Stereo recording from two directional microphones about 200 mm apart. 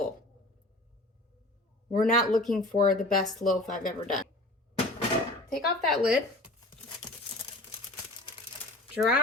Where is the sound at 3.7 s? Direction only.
45° left (ahead or behind).